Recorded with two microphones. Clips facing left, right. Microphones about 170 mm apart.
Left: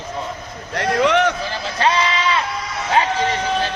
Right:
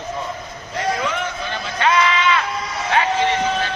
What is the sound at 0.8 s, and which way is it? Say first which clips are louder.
Speech: left 6 dB; 75° left (ahead or behind).